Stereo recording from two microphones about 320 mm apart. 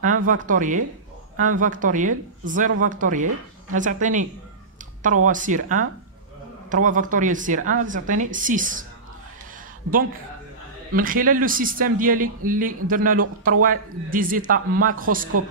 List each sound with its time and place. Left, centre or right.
0.0 s a man's voice: right
11.0 s a man's voice: right